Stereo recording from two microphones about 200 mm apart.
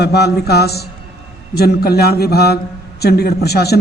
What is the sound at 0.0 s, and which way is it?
A man's voice, 55° left (ahead or behind).